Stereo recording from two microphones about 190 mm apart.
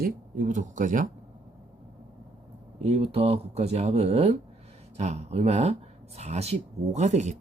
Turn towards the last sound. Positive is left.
turn(degrees=-40)  # may be behind; listen again after turning